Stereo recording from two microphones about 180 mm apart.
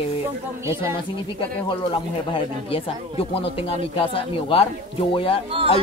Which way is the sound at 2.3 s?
30° left (ahead or behind).